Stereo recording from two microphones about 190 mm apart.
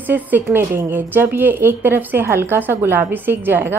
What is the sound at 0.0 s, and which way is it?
A woman's voice, 10° right (ahead or behind).